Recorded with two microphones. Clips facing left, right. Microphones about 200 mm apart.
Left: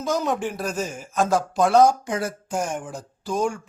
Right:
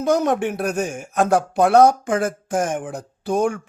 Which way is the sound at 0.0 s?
60° right (ahead or behind).